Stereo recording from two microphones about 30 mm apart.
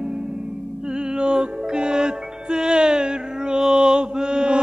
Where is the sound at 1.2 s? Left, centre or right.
Right.